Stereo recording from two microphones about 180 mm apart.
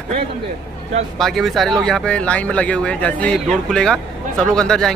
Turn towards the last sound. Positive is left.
turn(degrees=5)  # may be behind; listen again after turning